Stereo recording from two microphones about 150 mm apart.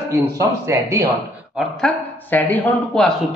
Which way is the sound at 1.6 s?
5° left (ahead or behind).